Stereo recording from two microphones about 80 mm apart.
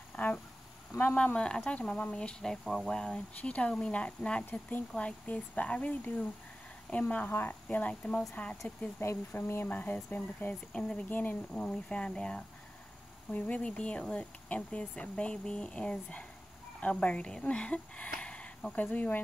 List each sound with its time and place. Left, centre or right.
0.1 s a sound: centre
1.1 s speech: centre
4.5 s speech: left
7.2 s speech: left
7.6 s speech: centre
9.0 s speech: left
9.7 s speech: left
10.7 s speech: centre
11.1 s a woman's voice: left